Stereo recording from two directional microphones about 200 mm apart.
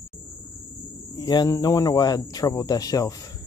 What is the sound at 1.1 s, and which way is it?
Speech, 20° left (ahead or behind).